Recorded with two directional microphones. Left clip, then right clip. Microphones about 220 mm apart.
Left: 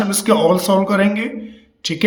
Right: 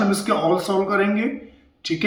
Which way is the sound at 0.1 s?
50° left (ahead or behind).